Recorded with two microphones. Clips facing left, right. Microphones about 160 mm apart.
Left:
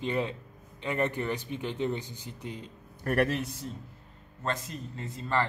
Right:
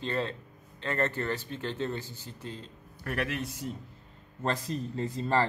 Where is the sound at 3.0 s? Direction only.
40° left (ahead or behind).